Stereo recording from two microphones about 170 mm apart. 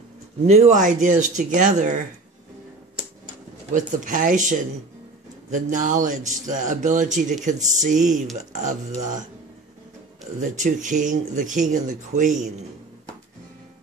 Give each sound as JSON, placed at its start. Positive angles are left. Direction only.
{"t": 0.5, "sound": "speech", "side_deg": -45}
{"t": 3.7, "sound": "speech", "side_deg": -50}
{"t": 10.4, "sound": "speech", "side_deg": -45}